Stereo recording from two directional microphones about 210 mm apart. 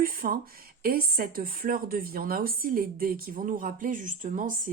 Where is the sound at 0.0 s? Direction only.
45° right (ahead or behind).